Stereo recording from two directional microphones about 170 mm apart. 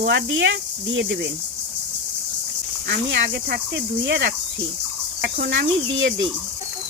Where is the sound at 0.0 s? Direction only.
90° right.